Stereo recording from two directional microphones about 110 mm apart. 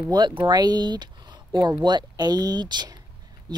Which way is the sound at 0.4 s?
40° right (ahead or behind).